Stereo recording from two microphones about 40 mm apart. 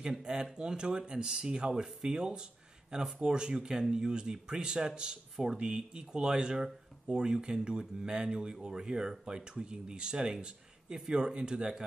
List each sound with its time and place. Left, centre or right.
0.0 s speech: centre